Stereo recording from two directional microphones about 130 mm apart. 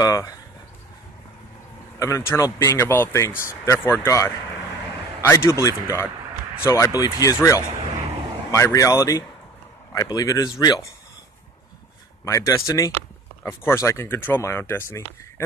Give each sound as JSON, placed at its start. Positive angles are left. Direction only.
{"t": 0.0, "sound": "speech", "side_deg": 25}
{"t": 2.0, "sound": "speech", "side_deg": 25}
{"t": 8.5, "sound": "speech", "side_deg": 25}
{"t": 12.3, "sound": "speech", "side_deg": 25}